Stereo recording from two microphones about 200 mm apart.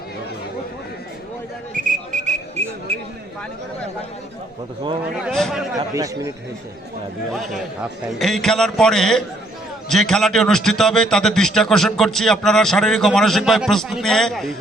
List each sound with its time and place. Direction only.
1.7 s a sound: 35° right (ahead or behind)
5.2 s a man's voice: centre (ahead or behind)
5.9 s speech: 15° right (ahead or behind)
7.3 s a man's voice: centre (ahead or behind)